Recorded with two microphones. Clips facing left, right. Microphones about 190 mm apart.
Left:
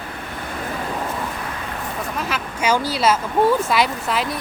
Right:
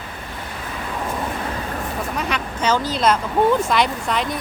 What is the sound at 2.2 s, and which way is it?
Speech, 5° left (ahead or behind).